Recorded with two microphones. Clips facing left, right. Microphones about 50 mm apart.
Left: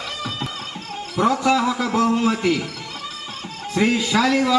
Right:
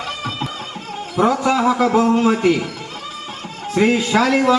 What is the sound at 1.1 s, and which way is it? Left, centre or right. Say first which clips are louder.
A man's voice: right 2 dB; right.